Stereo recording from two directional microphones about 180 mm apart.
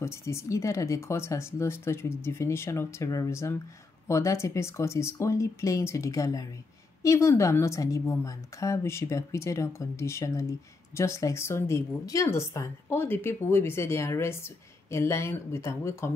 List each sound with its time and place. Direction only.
0.0 s a woman's voice: 15° left (ahead or behind)